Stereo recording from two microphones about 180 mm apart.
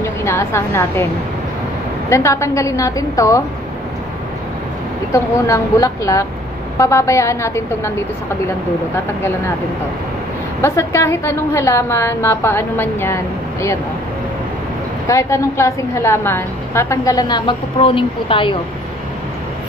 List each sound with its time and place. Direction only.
0.0 s a woman's voice: 15° left (ahead or behind)
2.0 s a woman's voice: 15° left (ahead or behind)
5.1 s a woman's voice: 20° left (ahead or behind)
10.6 s a woman's voice: 15° left (ahead or behind)
15.0 s a woman's voice: 15° left (ahead or behind)